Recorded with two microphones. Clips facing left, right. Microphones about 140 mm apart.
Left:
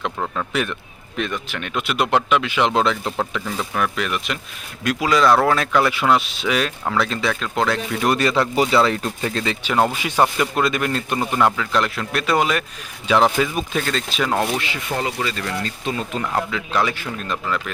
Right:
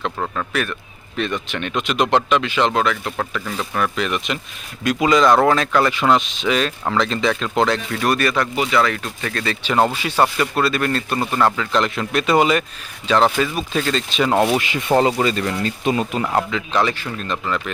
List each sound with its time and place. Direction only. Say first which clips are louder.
0.5 s speech: even; 15° left (ahead or behind)
3.2 s speech: even; 10° left (ahead or behind)
7.9 s speech: left 2 dB; 20° left (ahead or behind)
8.5 s speech: left 2 dB; 30° left (ahead or behind); by 11.3 s 15° left (ahead or behind)
11.3 s speech: right 1 dB; centre (ahead or behind)
13.1 s speech: even; 10° left (ahead or behind)
13.7 s speech: right 4 dB; centre (ahead or behind); by 14.8 s 15° right (ahead or behind)
14.9 s speech: right 9 dB; 30° right (ahead or behind)
16.5 s speech: right 2 dB; 5° left (ahead or behind)